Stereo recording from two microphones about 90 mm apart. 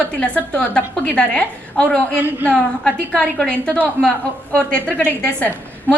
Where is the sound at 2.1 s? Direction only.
20° right (ahead or behind).